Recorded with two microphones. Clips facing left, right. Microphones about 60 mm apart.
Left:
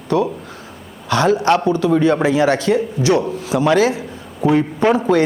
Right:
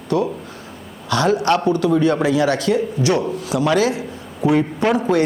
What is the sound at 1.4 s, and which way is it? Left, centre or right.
A man's voice, left.